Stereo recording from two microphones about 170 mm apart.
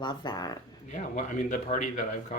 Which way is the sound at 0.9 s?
45° left (ahead or behind).